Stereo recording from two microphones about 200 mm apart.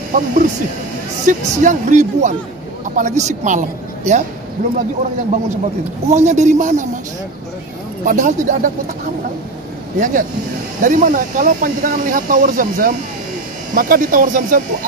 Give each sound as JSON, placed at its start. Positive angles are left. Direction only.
{"t": 0.1, "sound": "speech", "side_deg": -45}
{"t": 6.0, "sound": "speech", "side_deg": -35}
{"t": 8.0, "sound": "speech", "side_deg": -40}
{"t": 9.9, "sound": "speech", "side_deg": -40}